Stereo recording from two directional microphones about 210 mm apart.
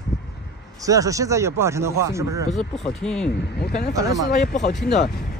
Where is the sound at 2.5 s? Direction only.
Centre (ahead or behind).